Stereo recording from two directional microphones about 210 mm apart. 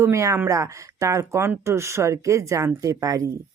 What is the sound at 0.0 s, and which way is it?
Speech, 15° right (ahead or behind).